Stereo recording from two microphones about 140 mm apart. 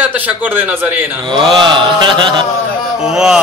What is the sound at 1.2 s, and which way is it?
Mantra, 35° right (ahead or behind).